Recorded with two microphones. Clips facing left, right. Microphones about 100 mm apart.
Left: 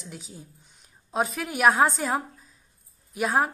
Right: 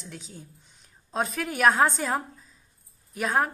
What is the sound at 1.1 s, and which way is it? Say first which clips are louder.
A woman's voice: left 1 dB; 5° left (ahead or behind).